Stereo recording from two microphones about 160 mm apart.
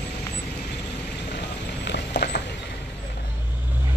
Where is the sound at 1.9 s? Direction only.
90° left.